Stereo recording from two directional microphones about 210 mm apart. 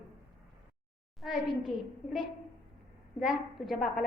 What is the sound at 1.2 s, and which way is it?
Speech, centre (ahead or behind).